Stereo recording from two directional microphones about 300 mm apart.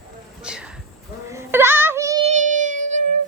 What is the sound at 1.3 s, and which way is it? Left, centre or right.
Child singing, centre.